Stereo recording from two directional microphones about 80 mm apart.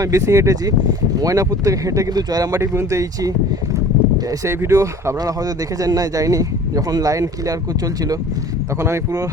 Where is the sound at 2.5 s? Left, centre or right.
Right.